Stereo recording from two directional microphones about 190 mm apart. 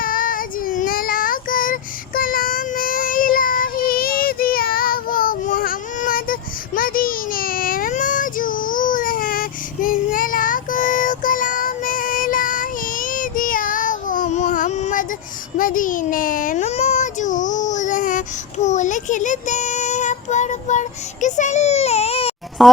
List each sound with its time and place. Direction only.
0.0 s child singing: 45° left (ahead or behind)
15.5 s a sound: 45° left (ahead or behind)
18.6 s child singing: 40° left (ahead or behind)
22.6 s speech: centre (ahead or behind)